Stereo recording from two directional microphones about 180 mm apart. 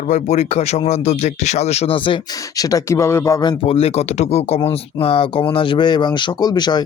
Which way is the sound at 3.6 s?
35° left (ahead or behind).